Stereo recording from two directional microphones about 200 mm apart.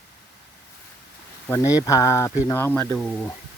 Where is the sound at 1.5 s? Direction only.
15° left (ahead or behind).